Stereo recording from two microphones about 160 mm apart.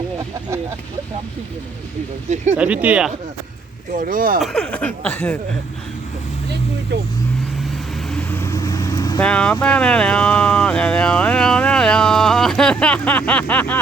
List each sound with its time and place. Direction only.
2.3 s speech: 45° right (ahead or behind)
2.6 s speech: 10° right (ahead or behind)
3.9 s speech: 60° right (ahead or behind)
4.4 s speech: centre (ahead or behind)
8.1 s vehicle: 15° left (ahead or behind)
9.2 s speech: 5° left (ahead or behind)